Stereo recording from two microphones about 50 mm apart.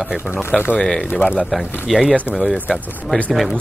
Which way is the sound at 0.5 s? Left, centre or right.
Centre.